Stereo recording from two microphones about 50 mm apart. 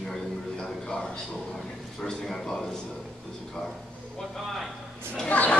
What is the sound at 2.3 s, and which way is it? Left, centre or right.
Speech, centre.